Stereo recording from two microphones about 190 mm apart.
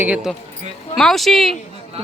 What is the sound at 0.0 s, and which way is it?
A woman's voice, 5° right (ahead or behind).